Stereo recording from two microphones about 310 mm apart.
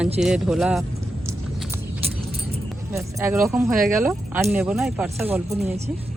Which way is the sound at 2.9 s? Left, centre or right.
Centre.